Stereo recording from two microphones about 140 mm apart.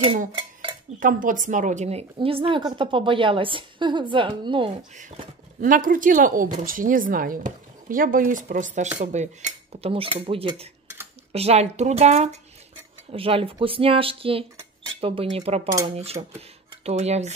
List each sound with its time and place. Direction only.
0.3 s dishes: 35° right (ahead or behind)
0.9 s speech: 75° right (ahead or behind); by 2.0 s 50° right (ahead or behind)
2.1 s a woman's voice: 40° right (ahead or behind)
4.9 s speech: 65° right (ahead or behind)
13.1 s a woman's voice: 40° right (ahead or behind)